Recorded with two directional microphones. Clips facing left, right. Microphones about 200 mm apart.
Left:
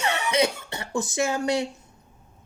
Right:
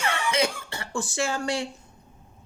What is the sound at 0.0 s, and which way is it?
Cough, 20° left (ahead or behind).